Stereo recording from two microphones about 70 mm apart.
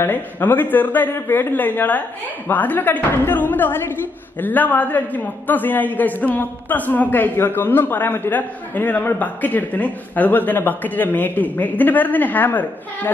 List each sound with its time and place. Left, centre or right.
0.0 s a man's voice: left